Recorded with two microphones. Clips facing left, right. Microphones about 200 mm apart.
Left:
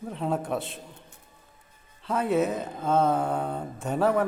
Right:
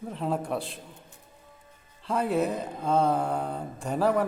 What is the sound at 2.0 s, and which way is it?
Speech, centre (ahead or behind).